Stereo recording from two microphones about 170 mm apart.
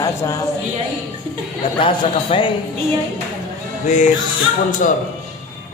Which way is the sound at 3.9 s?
45° left (ahead or behind).